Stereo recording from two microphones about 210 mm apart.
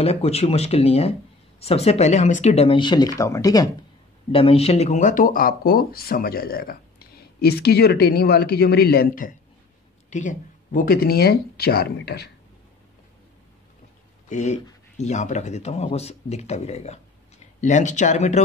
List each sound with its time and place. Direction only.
0.0 s speech: 30° left (ahead or behind)
4.3 s speech: 25° left (ahead or behind); by 12.3 s 50° left (ahead or behind)
14.3 s speech: 35° left (ahead or behind)